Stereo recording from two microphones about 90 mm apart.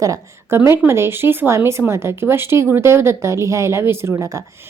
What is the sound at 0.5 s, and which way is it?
A woman's voice, 30° right (ahead or behind).